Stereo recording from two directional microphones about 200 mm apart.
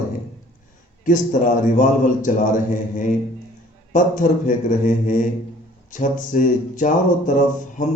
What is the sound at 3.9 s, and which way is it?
Speech, 40° left (ahead or behind).